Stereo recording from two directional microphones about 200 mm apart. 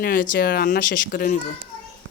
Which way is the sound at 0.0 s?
45° left (ahead or behind).